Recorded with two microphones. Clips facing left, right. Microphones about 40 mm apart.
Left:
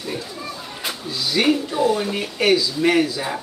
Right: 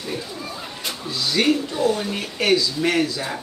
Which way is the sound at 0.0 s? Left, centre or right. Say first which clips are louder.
Left 1 dB; centre.